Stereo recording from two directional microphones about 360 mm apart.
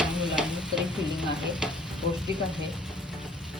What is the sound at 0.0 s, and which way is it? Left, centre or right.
Stir, centre.